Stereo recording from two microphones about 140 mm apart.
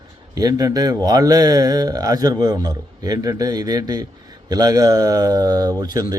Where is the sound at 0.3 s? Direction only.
25° right (ahead or behind).